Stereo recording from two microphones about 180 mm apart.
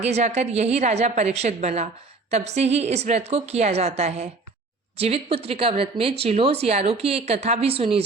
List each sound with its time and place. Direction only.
0.0 s speech: 40° right (ahead or behind)